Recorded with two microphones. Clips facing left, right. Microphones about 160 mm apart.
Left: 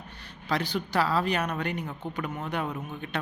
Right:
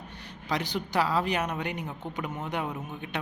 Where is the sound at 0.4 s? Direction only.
15° right (ahead or behind).